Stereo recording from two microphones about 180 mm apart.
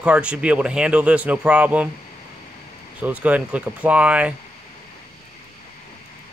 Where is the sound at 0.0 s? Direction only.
5° right (ahead or behind).